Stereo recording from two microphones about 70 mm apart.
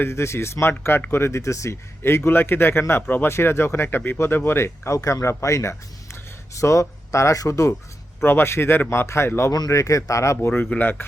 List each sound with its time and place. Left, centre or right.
0.0 s a man's voice: left
4.9 s speech: left
8.2 s a man's voice: left
9.5 s speech: left
10.5 s speech: left